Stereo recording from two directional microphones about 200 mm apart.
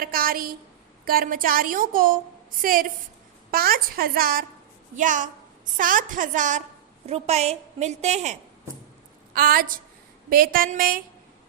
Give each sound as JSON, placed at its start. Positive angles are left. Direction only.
{"t": 0.0, "sound": "a woman's voice", "side_deg": -45}
{"t": 9.3, "sound": "a woman's voice", "side_deg": -45}